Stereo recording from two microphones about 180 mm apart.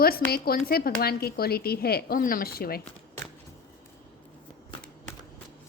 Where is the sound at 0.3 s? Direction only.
60° left (ahead or behind).